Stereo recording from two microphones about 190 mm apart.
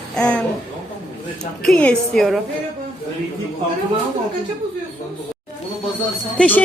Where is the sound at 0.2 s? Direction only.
5° left (ahead or behind).